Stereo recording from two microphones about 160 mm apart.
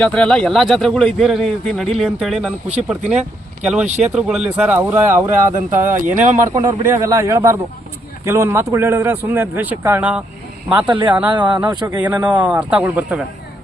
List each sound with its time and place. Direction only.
0.0 s a man's voice: 5° left (ahead or behind)
3.8 s speech: 45° right (ahead or behind)
4.1 s a man's voice: centre (ahead or behind)
6.1 s speech: 55° right (ahead or behind)
6.4 s speech: 25° right (ahead or behind); by 10.2 s 10° right (ahead or behind)
10.8 s speech: 30° right (ahead or behind)
11.1 s speech: 10° right (ahead or behind)
11.7 s speech: 25° right (ahead or behind)
11.9 s speech: 10° right (ahead or behind)